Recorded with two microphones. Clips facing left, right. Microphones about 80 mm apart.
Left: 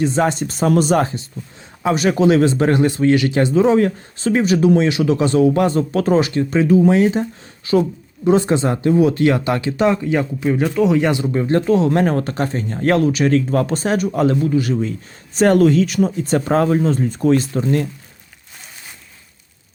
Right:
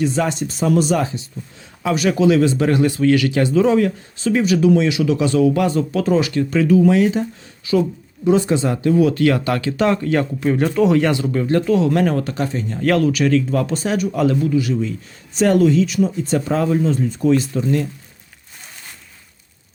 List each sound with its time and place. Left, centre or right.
0.0 s speech: left
9.9 s speech: centre
11.1 s speech: centre
11.4 s speech: left